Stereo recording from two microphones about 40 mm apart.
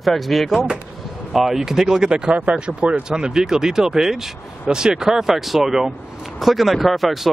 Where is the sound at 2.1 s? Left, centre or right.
Right.